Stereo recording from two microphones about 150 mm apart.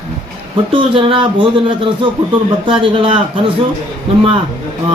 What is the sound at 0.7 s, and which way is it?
A man's voice, 35° right (ahead or behind).